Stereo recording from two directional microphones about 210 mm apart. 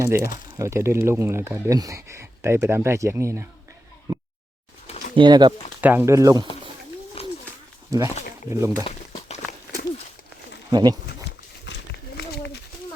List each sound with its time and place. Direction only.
0.5 s speech: 15° right (ahead or behind)
5.1 s speech: 20° right (ahead or behind)
5.8 s speech: 10° right (ahead or behind)
7.2 s a sound: 30° left (ahead or behind)
7.9 s speech: 15° right (ahead or behind)
9.1 s walk: 30° left (ahead or behind)
10.7 s speech: 20° right (ahead or behind)